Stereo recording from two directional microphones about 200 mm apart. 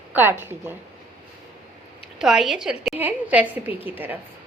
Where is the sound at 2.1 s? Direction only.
Centre (ahead or behind).